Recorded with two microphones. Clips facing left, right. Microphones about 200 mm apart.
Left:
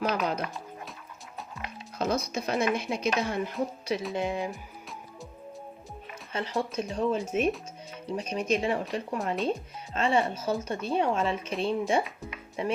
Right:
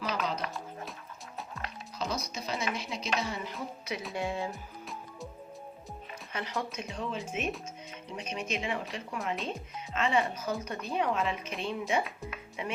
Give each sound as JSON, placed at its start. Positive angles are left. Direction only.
{"t": 0.1, "sound": "speech", "side_deg": 55}
{"t": 2.0, "sound": "music", "side_deg": 55}
{"t": 2.3, "sound": "a woman's voice", "side_deg": 55}
{"t": 4.1, "sound": "music", "side_deg": 20}
{"t": 6.3, "sound": "speech", "side_deg": 30}